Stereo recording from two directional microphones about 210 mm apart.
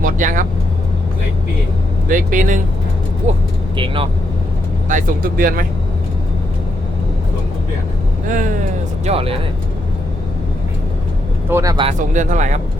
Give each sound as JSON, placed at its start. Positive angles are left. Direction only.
{"t": 0.0, "sound": "vehicle", "side_deg": -40}
{"t": 2.0, "sound": "speech", "side_deg": -40}
{"t": 4.9, "sound": "speech", "side_deg": -40}
{"t": 9.0, "sound": "speech", "side_deg": -25}
{"t": 11.4, "sound": "speech", "side_deg": -15}
{"t": 11.9, "sound": "speech", "side_deg": -35}